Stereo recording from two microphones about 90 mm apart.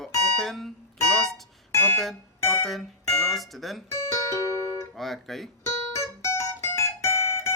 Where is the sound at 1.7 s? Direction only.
30° left (ahead or behind).